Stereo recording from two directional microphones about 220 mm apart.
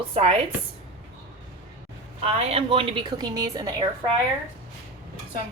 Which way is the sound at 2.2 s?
25° right (ahead or behind).